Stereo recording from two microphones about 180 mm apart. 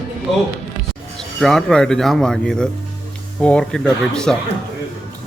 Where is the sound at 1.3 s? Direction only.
Centre (ahead or behind).